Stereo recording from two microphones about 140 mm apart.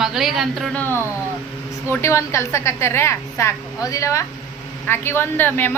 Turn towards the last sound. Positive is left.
turn(degrees=15)  # may be behind; listen again after turning